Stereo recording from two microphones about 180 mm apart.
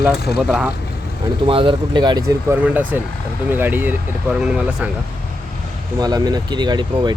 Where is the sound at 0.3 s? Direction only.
5° right (ahead or behind).